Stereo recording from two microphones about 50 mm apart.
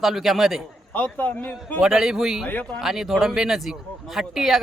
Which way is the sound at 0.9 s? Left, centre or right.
Left.